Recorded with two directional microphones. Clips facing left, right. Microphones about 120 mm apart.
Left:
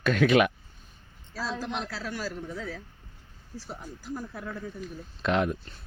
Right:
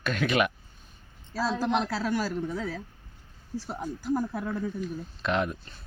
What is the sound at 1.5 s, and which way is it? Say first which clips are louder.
Speech: right 7 dB; 70° right (ahead or behind).